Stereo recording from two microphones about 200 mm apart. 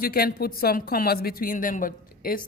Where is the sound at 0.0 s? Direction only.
50° left (ahead or behind).